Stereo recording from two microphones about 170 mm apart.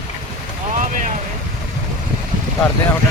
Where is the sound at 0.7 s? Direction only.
50° right (ahead or behind).